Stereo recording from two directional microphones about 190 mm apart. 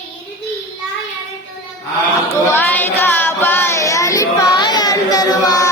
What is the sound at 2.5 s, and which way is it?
Child singing, 10° left (ahead or behind).